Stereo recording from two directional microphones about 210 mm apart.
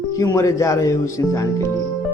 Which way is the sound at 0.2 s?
15° left (ahead or behind).